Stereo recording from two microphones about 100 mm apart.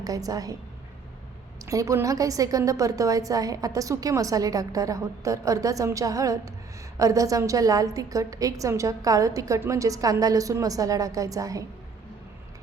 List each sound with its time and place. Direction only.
0.0 s a woman's voice: 35° right (ahead or behind)
1.6 s a woman's voice: 30° right (ahead or behind)